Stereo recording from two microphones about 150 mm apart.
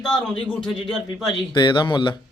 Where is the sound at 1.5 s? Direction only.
30° left (ahead or behind).